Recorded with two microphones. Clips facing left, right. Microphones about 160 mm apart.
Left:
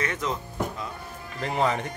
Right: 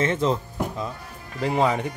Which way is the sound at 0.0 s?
30° right (ahead or behind).